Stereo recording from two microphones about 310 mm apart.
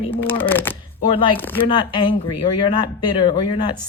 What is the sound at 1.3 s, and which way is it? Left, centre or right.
Speech, centre.